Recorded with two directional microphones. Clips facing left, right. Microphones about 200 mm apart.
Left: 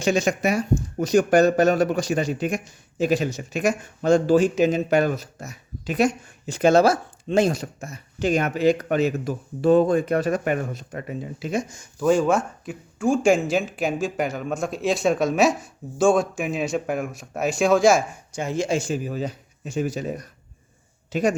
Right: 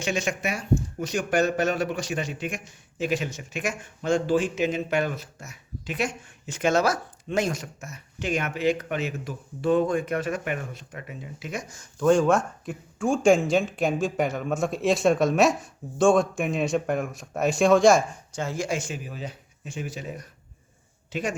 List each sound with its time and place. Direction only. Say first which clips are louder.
0.0 s speech: left 7 dB; 40° left (ahead or behind)
11.9 s speech: left 1 dB; 5° left (ahead or behind); by 21.3 s 40° left (ahead or behind)